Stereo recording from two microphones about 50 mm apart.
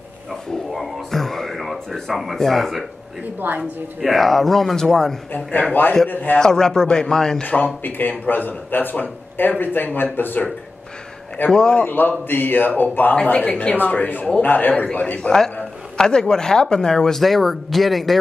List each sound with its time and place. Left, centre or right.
0.3 s speech: centre
3.3 s a woman's voice: right
4.0 s speech: centre
5.3 s speech: left
6.3 s speech: centre
7.4 s speech: left
11.5 s speech: centre
11.8 s speech: left
13.1 s a man's voice: left
15.1 s speech: centre